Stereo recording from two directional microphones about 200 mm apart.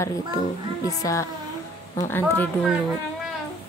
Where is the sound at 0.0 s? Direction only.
15° left (ahead or behind).